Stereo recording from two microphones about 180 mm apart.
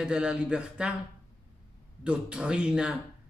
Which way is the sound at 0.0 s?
5° right (ahead or behind).